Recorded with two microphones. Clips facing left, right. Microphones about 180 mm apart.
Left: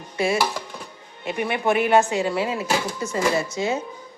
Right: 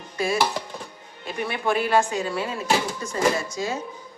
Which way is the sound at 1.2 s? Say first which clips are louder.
Left 3 dB; 20° left (ahead or behind).